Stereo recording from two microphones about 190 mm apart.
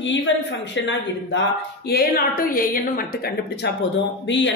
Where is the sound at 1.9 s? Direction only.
50° left (ahead or behind).